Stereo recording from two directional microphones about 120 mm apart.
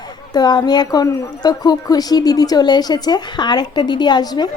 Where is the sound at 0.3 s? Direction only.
35° left (ahead or behind).